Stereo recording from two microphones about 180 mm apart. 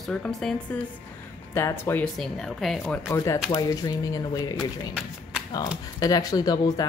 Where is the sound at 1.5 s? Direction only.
15° left (ahead or behind).